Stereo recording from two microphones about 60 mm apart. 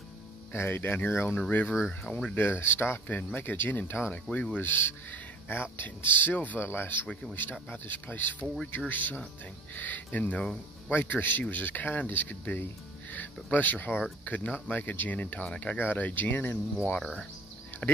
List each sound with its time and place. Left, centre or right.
0.5 s speech: left
2.0 s speech: centre
2.6 s speech: left
4.1 s speech: left
4.6 s speech: left
6.6 s speech: left